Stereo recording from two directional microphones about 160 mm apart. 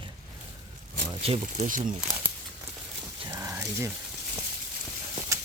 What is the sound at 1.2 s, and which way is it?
Speech, 45° right (ahead or behind).